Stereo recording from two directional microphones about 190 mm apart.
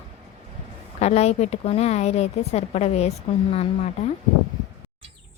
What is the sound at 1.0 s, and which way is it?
A woman's voice, 35° left (ahead or behind).